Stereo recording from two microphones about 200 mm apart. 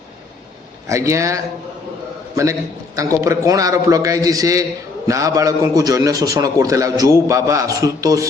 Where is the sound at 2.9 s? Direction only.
15° right (ahead or behind).